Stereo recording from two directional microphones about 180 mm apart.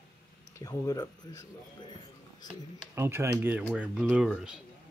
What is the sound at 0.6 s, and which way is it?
Speech, 20° left (ahead or behind).